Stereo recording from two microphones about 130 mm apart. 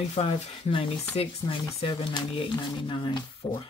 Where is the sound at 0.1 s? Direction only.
45° left (ahead or behind).